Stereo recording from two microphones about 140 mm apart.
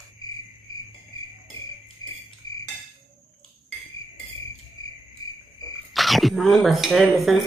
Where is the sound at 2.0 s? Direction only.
30° left (ahead or behind).